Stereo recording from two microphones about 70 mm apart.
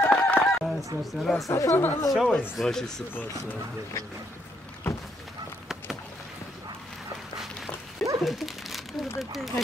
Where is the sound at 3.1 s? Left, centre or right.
Left.